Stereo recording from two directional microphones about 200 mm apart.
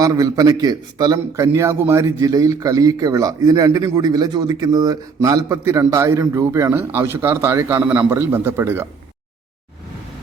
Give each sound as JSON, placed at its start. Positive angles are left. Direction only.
{"t": 0.0, "sound": "a man's voice", "side_deg": -20}